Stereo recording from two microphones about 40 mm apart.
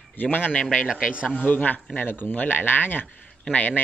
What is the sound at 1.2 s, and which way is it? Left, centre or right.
Speech, left.